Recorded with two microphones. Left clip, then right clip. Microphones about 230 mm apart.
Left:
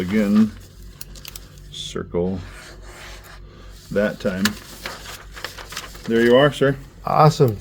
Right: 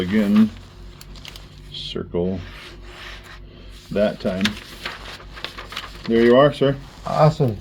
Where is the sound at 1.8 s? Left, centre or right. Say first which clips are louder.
Left 1 dB; left.